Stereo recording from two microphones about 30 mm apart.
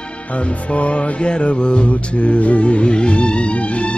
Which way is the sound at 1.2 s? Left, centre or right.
Left.